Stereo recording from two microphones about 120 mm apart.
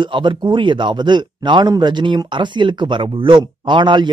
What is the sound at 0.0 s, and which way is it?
A man's voice, 40° right (ahead or behind).